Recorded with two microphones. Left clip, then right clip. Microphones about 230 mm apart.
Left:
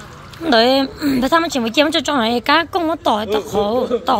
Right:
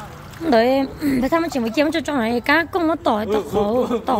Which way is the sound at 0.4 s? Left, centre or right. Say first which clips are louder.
Left 3 dB; centre.